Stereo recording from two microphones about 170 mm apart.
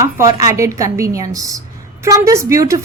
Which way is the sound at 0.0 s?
20° right (ahead or behind).